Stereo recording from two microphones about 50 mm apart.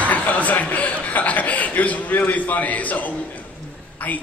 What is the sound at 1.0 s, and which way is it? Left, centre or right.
A man's voice, left.